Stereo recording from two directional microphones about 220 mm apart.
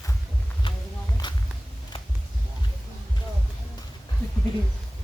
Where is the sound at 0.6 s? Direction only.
20° left (ahead or behind).